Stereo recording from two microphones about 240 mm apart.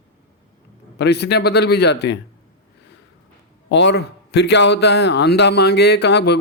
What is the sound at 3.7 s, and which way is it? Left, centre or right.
Speech, left.